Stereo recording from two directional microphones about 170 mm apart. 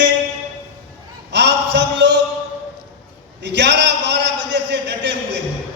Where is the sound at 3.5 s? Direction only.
90° right.